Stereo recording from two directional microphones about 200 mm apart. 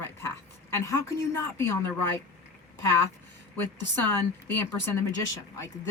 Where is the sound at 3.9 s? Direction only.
10° left (ahead or behind).